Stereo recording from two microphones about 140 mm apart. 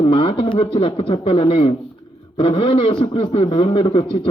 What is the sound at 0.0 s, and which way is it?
A man's voice, 40° left (ahead or behind).